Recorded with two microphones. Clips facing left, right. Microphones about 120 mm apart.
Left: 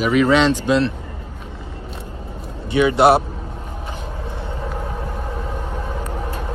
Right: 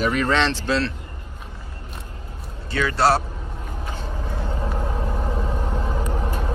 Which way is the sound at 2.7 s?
20° left (ahead or behind).